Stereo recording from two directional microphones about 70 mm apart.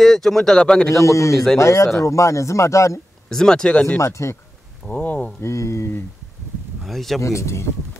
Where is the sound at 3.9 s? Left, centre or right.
Left.